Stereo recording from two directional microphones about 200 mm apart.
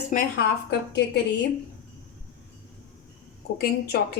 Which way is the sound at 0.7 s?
55° left (ahead or behind).